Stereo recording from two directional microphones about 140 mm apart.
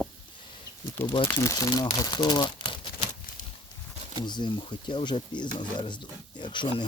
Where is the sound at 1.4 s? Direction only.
25° left (ahead or behind).